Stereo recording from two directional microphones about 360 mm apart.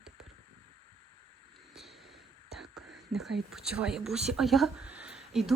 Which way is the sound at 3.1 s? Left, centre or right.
Centre.